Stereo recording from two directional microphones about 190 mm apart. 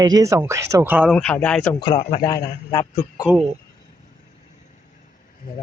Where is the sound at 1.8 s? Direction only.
25° left (ahead or behind).